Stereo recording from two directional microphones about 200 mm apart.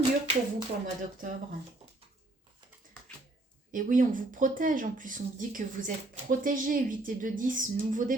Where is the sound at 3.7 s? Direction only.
40° right (ahead or behind).